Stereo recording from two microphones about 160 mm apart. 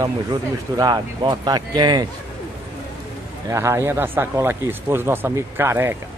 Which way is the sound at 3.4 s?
15° right (ahead or behind).